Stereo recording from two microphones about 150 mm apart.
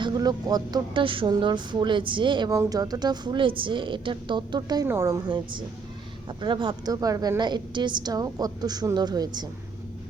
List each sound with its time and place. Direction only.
0.0 s speech: 25° right (ahead or behind)
4.9 s a woman's voice: 20° right (ahead or behind)
6.4 s a woman's voice: 30° right (ahead or behind)